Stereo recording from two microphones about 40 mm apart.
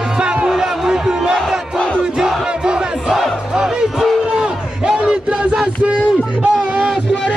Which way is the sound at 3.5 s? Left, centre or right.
Centre.